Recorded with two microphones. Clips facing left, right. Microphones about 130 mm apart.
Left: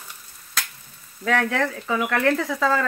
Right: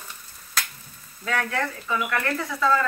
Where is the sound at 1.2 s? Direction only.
90° left.